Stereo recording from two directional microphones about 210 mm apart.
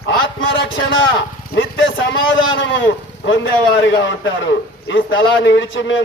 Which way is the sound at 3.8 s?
60° left (ahead or behind).